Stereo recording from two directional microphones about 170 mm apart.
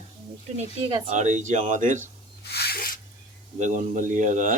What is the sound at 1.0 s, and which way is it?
Speech, 45° right (ahead or behind).